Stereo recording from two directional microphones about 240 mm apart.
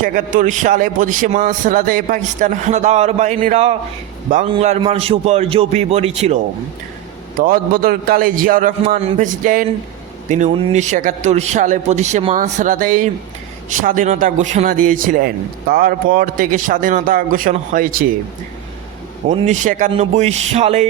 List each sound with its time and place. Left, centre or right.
0.0 s a man's voice: right
19.3 s a man's voice: right